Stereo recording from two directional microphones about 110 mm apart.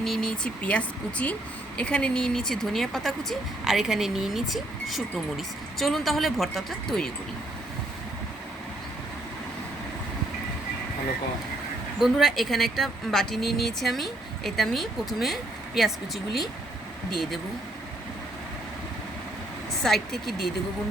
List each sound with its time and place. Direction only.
0.0 s speech: centre (ahead or behind)
11.9 s speech: centre (ahead or behind)
19.8 s speech: centre (ahead or behind)